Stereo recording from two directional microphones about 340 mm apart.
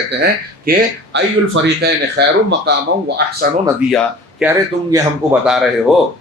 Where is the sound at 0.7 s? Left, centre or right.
Right.